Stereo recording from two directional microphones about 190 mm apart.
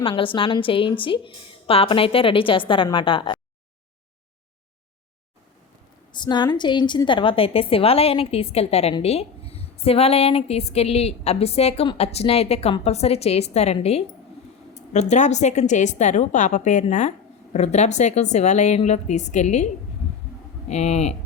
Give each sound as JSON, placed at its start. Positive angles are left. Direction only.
{"t": 0.0, "sound": "a woman's voice", "side_deg": 30}
{"t": 6.1, "sound": "a woman's voice", "side_deg": 25}
{"t": 20.7, "sound": "a woman's voice", "side_deg": 35}